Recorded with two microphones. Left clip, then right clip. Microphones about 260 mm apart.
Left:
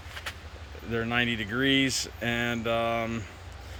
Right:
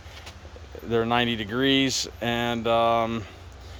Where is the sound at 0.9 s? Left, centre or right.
Centre.